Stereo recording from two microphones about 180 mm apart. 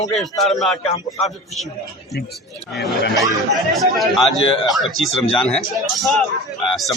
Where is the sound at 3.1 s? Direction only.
Centre (ahead or behind).